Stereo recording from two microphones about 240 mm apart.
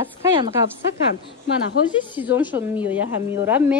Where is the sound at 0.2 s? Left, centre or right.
Centre.